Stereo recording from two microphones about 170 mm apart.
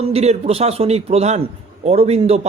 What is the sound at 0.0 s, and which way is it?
A man's voice, 40° right (ahead or behind).